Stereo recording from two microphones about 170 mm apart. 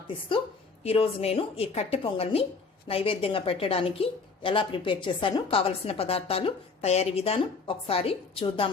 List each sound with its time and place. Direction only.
0.9 s a woman's voice: 35° left (ahead or behind)